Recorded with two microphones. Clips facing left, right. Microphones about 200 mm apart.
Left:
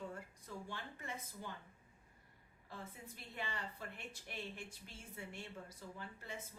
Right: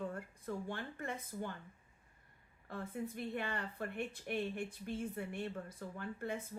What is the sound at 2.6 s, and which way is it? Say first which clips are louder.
A woman's voice: right 10 dB; 55° right (ahead or behind).